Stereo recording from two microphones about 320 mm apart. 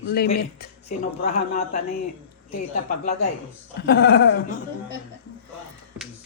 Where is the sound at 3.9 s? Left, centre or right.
Left.